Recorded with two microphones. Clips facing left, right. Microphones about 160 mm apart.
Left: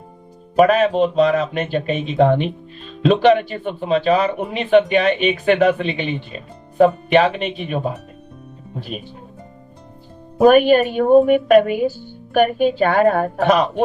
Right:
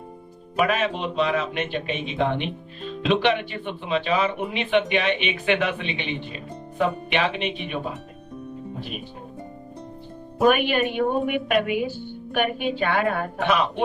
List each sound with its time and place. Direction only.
0.5 s speech: 40° left (ahead or behind)
8.9 s speech: 40° left (ahead or behind)
10.4 s speech: 40° left (ahead or behind)